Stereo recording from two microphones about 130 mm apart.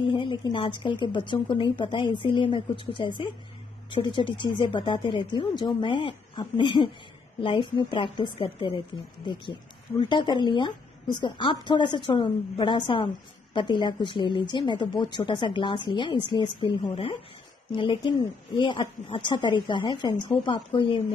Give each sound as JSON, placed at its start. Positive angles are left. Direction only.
{"t": 0.1, "sound": "a woman's voice", "side_deg": 40}